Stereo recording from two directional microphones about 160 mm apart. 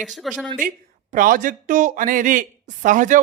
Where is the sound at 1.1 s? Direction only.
55° right (ahead or behind).